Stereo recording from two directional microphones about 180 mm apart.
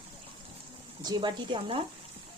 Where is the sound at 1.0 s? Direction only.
25° right (ahead or behind).